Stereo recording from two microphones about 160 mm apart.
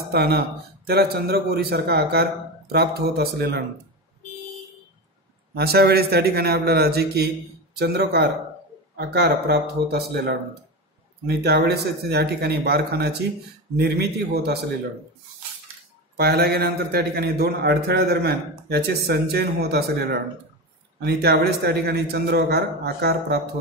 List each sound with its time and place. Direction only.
0.1 s a man's voice: 80° right
5.5 s a man's voice: 75° right (ahead or behind)
8.9 s a man's voice: 75° right (ahead or behind); by 14.6 s 90° right
16.2 s a man's voice: 80° right